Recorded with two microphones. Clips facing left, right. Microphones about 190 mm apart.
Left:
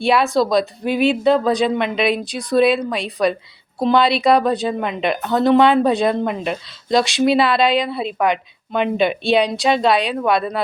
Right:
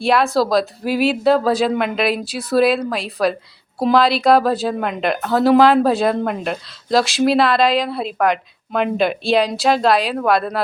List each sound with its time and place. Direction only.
0.0 s a woman's voice: centre (ahead or behind)